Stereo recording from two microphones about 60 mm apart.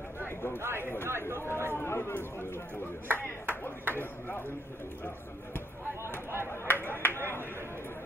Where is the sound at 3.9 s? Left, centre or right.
Left.